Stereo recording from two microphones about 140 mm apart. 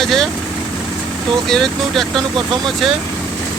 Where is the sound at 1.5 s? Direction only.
Centre (ahead or behind).